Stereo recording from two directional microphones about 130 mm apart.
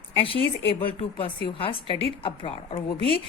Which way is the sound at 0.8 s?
45° left (ahead or behind).